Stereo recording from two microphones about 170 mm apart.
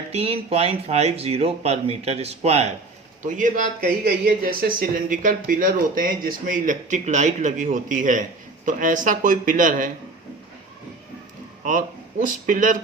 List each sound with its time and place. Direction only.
0.1 s speech: 40° right (ahead or behind)
3.3 s speech: 50° right (ahead or behind)
4.0 s speech: 65° right (ahead or behind)
12.2 s speech: 50° right (ahead or behind)